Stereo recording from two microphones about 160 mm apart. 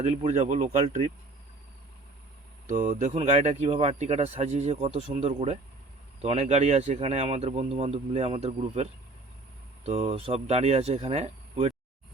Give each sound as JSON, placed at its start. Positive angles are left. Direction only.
{"t": 0.0, "sound": "speech", "side_deg": -45}
{"t": 2.6, "sound": "speech", "side_deg": -55}